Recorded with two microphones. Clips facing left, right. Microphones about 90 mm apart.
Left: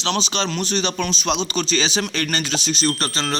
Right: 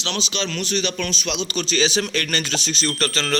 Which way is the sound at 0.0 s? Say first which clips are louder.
Left 4 dB; 35° left (ahead or behind).